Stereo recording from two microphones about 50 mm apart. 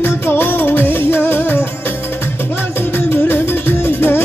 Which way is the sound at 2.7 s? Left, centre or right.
Left.